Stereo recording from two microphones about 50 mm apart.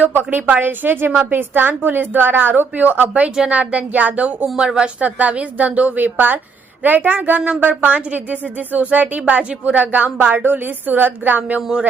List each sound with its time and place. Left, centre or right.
0.1 s a woman's voice: right
4.5 s speech: centre
5.0 s a woman's voice: right